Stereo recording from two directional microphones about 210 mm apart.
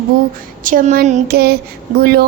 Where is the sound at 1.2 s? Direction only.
50° right (ahead or behind).